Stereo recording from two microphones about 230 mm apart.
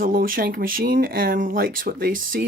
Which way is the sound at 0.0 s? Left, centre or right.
Right.